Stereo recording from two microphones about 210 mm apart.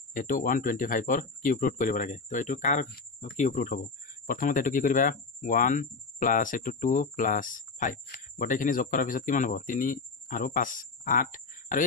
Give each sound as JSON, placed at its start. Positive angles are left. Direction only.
{"t": 0.1, "sound": "speech", "side_deg": 40}